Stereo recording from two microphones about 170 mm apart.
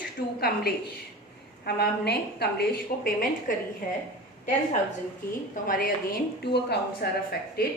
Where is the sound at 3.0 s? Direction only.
55° left (ahead or behind).